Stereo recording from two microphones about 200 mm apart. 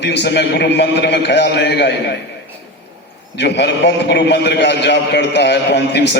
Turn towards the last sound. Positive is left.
turn(degrees=60)  # may be behind; listen again after turning